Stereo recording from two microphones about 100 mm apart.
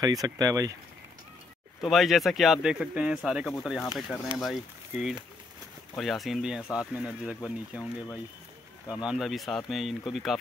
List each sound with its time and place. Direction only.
0.0 s speech: 40° right (ahead or behind)
1.8 s speech: centre (ahead or behind)
9.0 s speech: 5° right (ahead or behind)